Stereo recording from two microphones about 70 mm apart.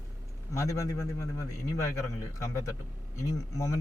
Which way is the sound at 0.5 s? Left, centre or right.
Left.